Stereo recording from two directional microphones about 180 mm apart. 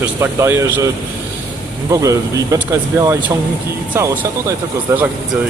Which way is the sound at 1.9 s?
20° right (ahead or behind).